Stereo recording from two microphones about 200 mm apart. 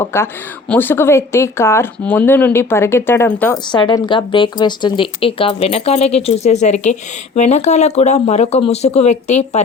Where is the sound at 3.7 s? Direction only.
20° left (ahead or behind).